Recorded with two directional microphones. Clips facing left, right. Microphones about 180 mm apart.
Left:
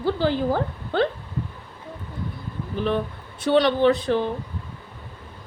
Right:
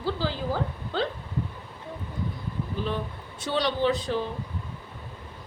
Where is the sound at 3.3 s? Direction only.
55° left (ahead or behind).